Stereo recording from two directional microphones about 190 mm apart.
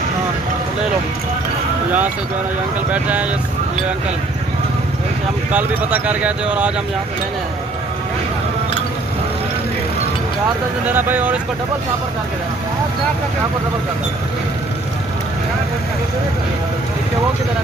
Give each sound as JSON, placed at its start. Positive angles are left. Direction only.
{"t": 2.9, "sound": "speech", "side_deg": -10}
{"t": 5.5, "sound": "speech", "side_deg": -10}
{"t": 10.8, "sound": "speech", "side_deg": -10}